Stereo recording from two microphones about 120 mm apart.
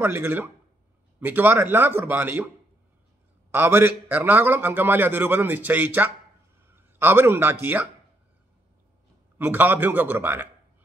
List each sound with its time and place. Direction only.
0.0 s a man's voice: 15° right (ahead or behind)
3.5 s a man's voice: 15° right (ahead or behind)
9.4 s a man's voice: 15° right (ahead or behind)